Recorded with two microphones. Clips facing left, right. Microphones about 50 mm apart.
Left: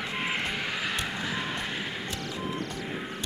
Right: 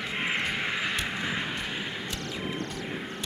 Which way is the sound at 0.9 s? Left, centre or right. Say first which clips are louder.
Right 1 dB; centre.